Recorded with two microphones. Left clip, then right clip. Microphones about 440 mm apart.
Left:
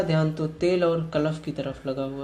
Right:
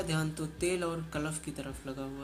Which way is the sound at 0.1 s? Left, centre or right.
Right.